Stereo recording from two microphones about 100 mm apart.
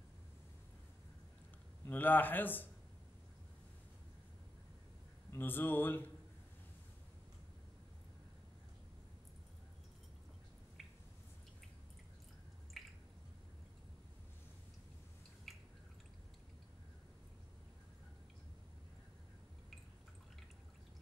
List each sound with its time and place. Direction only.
1.9 s speech: 20° left (ahead or behind)
5.3 s speech: 20° left (ahead or behind)
12.7 s drip: centre (ahead or behind)
15.5 s drip: centre (ahead or behind)